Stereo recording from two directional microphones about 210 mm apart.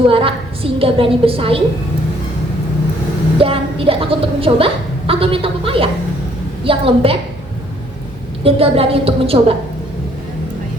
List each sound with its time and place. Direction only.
0.1 s a woman's voice: 25° right (ahead or behind)
3.3 s a woman's voice: 25° right (ahead or behind)
8.4 s a woman's voice: 25° right (ahead or behind)